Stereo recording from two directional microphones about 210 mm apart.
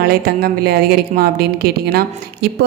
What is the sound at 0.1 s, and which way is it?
A woman's voice, 45° right (ahead or behind).